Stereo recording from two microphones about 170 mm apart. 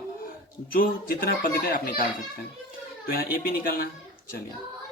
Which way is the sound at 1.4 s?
55° left (ahead or behind).